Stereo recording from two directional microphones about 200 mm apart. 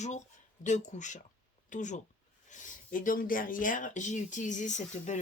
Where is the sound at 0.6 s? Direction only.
35° left (ahead or behind).